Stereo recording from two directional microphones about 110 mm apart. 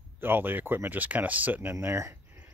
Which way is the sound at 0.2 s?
20° right (ahead or behind).